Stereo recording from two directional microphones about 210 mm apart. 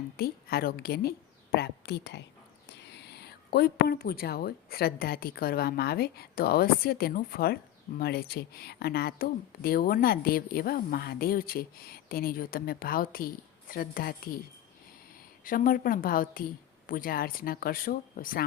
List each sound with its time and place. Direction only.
0.2 s speech: 45° left (ahead or behind)
15.4 s speech: 40° left (ahead or behind)